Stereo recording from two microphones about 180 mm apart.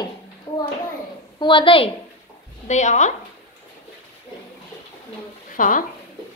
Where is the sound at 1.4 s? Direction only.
30° left (ahead or behind).